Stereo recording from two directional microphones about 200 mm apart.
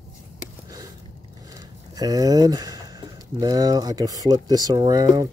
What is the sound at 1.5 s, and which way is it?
Speech, 20° right (ahead or behind).